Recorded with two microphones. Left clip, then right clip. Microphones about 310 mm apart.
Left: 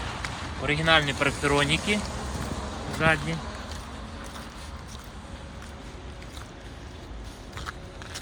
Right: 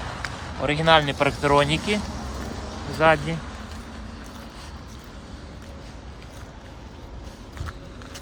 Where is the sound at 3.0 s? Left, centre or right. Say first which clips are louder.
Right 6 dB; centre.